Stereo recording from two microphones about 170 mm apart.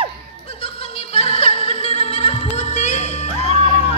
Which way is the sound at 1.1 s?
35° left (ahead or behind).